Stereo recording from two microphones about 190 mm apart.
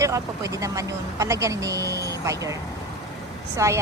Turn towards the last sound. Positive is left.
turn(degrees=-15)  # may be behind; listen again after turning